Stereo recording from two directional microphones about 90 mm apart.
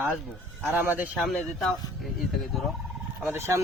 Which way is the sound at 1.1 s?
Centre (ahead or behind).